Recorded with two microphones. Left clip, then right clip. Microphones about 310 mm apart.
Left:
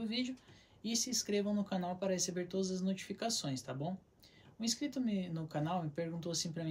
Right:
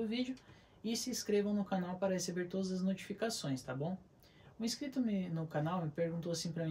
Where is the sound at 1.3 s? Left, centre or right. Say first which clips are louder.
Right 6 dB; centre.